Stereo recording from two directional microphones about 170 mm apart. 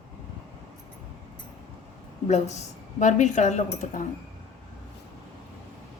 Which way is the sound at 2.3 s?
40° left (ahead or behind).